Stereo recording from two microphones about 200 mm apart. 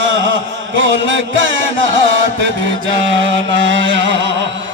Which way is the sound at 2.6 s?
70° right (ahead or behind).